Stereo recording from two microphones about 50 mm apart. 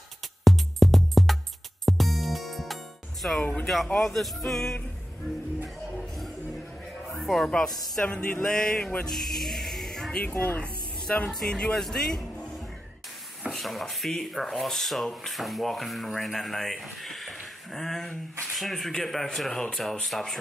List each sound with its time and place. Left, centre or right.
0.4 s music: centre
3.6 s speech: centre
7.1 s music: centre
7.4 s speech: centre
8.0 s music: left
8.4 s speech: centre
9.0 s music: centre
10.2 s speech: left
11.1 s music: left
11.4 s speech: centre
13.5 s speech: centre